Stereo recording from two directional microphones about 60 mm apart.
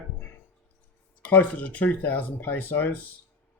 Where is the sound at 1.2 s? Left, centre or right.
Left.